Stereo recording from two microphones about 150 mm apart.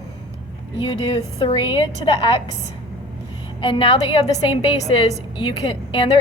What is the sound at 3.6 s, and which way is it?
A woman's voice, 35° left (ahead or behind).